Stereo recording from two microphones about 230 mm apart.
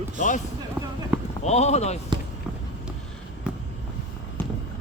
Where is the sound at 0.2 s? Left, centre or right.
Left.